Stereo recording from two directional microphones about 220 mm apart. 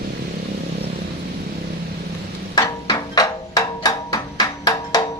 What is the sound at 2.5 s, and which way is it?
Music, 15° left (ahead or behind).